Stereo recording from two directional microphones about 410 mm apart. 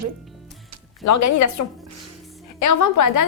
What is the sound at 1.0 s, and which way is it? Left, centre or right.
A woman's voice, left.